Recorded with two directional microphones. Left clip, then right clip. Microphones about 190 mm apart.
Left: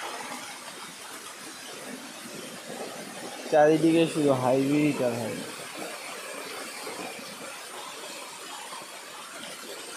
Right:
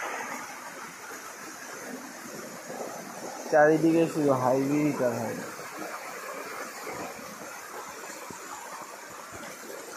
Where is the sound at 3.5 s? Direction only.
30° left (ahead or behind).